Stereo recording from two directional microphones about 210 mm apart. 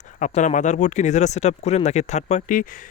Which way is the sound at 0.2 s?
35° left (ahead or behind).